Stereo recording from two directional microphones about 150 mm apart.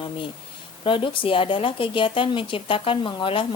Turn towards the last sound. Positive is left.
turn(degrees=35)  # may be behind; listen again after turning